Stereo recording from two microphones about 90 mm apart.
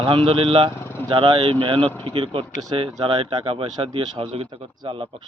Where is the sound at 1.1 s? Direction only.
70° right (ahead or behind); by 5.2 s 85° right.